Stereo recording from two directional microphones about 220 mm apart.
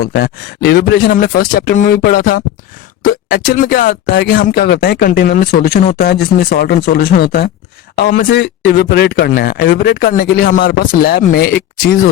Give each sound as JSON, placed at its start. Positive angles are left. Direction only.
{"t": 0.0, "sound": "speech", "side_deg": 45}